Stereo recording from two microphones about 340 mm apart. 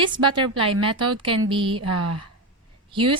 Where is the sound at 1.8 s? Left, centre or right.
Right.